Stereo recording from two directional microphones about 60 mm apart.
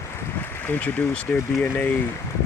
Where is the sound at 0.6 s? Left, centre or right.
Left.